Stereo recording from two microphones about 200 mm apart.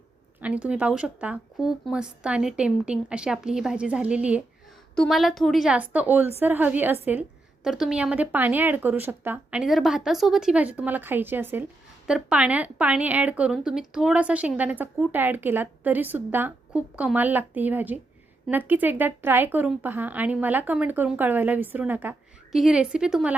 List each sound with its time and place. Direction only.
0.3 s a woman's voice: 5° right (ahead or behind)